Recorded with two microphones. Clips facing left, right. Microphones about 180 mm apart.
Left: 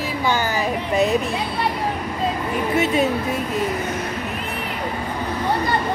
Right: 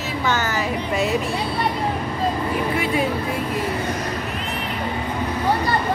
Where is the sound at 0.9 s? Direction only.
20° left (ahead or behind).